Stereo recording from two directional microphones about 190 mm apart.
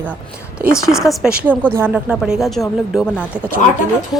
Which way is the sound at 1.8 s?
5° right (ahead or behind).